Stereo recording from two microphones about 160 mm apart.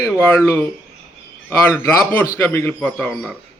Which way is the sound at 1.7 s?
15° left (ahead or behind).